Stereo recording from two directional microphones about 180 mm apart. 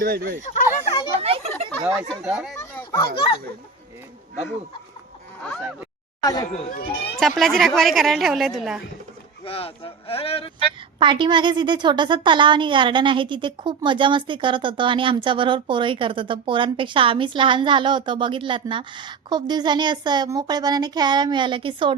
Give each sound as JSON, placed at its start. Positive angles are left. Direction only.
{"t": 0.0, "sound": "speech", "side_deg": -60}
{"t": 0.4, "sound": "speech", "side_deg": 45}
{"t": 1.2, "sound": "a sound", "side_deg": -35}
{"t": 1.8, "sound": "a woman's voice", "side_deg": -5}
{"t": 2.6, "sound": "children playing", "side_deg": 15}
{"t": 6.2, "sound": "speech", "side_deg": 20}
{"t": 6.5, "sound": "a child's voice", "side_deg": 50}
{"t": 7.2, "sound": "a woman's voice", "side_deg": 0}
{"t": 9.4, "sound": "speech", "side_deg": 35}
{"t": 11.0, "sound": "a woman's voice", "side_deg": -25}